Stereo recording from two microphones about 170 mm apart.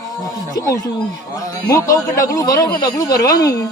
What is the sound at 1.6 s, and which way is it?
A man's voice, 20° left (ahead or behind).